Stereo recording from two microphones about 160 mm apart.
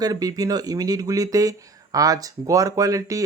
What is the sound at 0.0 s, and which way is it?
Speech, 25° right (ahead or behind).